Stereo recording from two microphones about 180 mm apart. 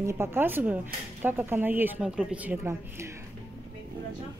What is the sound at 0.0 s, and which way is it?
A woman's voice, 15° right (ahead or behind).